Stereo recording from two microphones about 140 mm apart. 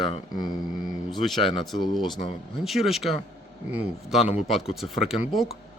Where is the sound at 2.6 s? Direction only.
Centre (ahead or behind).